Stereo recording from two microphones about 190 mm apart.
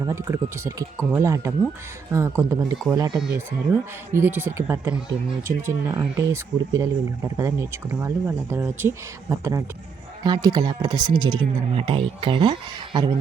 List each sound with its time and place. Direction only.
0.0 s speech: 15° right (ahead or behind)